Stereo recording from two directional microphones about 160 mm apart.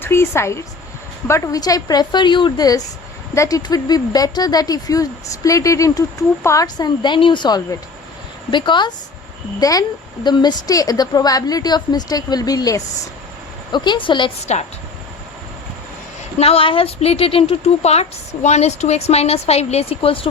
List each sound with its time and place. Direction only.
0.0 s speech: 15° left (ahead or behind); by 14.3 s 30° left (ahead or behind)
16.4 s speech: 35° left (ahead or behind)